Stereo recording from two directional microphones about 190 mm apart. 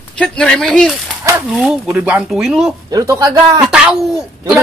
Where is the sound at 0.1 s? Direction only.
5° left (ahead or behind).